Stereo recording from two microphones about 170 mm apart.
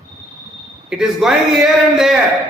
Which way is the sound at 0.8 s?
5° right (ahead or behind).